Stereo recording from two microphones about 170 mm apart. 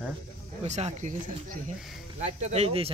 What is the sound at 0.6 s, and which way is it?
Speech, 40° right (ahead or behind).